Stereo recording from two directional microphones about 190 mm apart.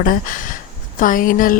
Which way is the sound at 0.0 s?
45° left (ahead or behind).